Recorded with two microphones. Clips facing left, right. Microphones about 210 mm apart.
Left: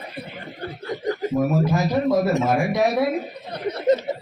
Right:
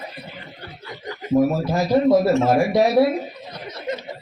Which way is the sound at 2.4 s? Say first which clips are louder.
Right 3 dB; 30° right (ahead or behind).